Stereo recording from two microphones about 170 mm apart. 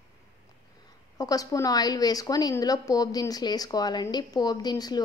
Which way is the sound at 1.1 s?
20° left (ahead or behind).